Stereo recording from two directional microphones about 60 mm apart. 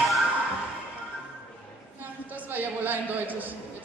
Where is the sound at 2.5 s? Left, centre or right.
Right.